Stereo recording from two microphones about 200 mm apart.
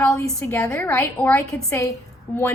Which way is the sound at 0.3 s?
5° left (ahead or behind).